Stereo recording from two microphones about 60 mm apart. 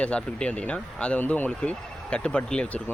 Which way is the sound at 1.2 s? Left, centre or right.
Left.